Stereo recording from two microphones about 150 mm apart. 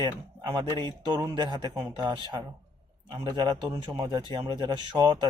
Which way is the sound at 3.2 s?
30° right (ahead or behind).